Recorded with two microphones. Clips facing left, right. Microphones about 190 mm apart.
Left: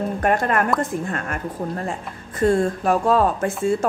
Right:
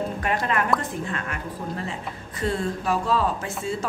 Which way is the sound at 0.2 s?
50° left (ahead or behind).